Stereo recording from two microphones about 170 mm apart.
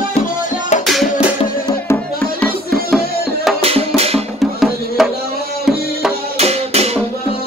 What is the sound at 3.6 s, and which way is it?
Music, 35° right (ahead or behind).